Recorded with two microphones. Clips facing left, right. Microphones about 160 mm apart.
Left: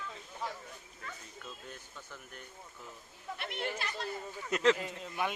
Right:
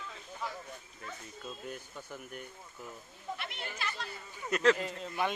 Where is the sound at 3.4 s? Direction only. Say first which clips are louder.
Left 4 dB; 50° left (ahead or behind).